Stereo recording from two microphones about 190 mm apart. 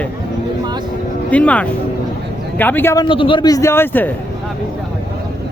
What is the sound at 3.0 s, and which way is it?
Speech, 25° left (ahead or behind).